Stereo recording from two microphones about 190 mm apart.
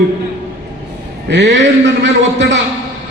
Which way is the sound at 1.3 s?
65° right (ahead or behind).